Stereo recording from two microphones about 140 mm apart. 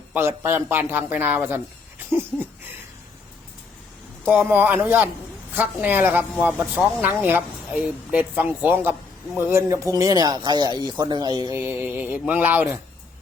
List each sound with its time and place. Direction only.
0.1 s speech: 15° right (ahead or behind)
2.0 s a sound: 15° right (ahead or behind)
4.3 s speech: 10° right (ahead or behind)